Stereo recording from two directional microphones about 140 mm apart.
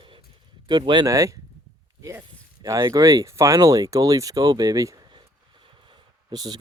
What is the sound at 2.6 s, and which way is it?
Speech, 20° right (ahead or behind).